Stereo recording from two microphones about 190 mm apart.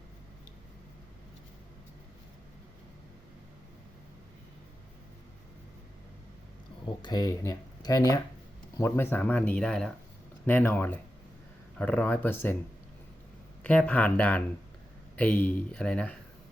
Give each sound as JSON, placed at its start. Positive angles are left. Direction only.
{"t": 6.8, "sound": "speech", "side_deg": 20}
{"t": 13.7, "sound": "speech", "side_deg": 10}